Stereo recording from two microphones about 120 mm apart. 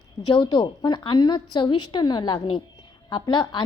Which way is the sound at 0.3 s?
40° left (ahead or behind).